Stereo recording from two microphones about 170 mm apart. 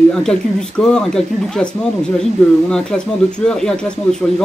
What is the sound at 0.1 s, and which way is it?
Speech, 5° left (ahead or behind).